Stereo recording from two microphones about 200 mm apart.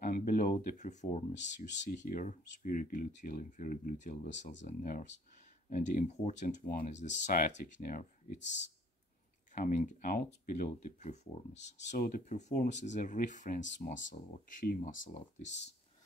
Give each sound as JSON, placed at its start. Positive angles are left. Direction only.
{"t": 0.0, "sound": "speech", "side_deg": 45}
{"t": 9.6, "sound": "speech", "side_deg": 40}